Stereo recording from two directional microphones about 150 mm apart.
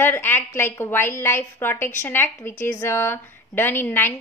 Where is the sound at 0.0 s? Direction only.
15° left (ahead or behind).